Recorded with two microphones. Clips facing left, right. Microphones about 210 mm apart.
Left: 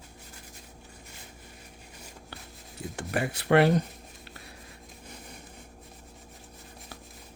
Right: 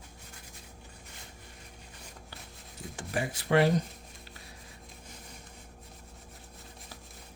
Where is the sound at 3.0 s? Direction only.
65° left (ahead or behind).